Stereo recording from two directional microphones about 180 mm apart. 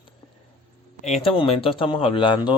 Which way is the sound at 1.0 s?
40° left (ahead or behind).